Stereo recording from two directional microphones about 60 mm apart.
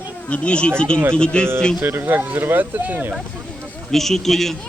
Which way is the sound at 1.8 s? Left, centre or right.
Right.